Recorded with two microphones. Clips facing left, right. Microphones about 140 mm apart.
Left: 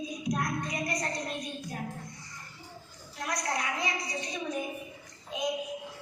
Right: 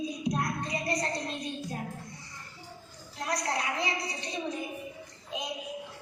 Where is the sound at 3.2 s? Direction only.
30° right (ahead or behind).